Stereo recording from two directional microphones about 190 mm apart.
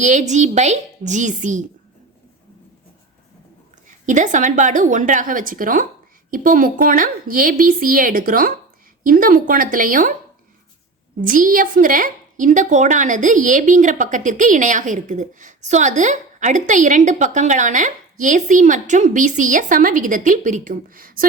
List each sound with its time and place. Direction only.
0.0 s a woman's voice: 40° right (ahead or behind)
4.0 s a woman's voice: 40° right (ahead or behind)
11.2 s a woman's voice: 45° right (ahead or behind)